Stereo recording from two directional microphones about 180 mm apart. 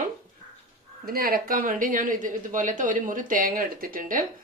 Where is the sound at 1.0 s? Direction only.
55° right (ahead or behind).